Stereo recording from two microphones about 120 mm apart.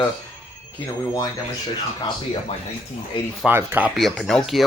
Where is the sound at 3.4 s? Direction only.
15° right (ahead or behind).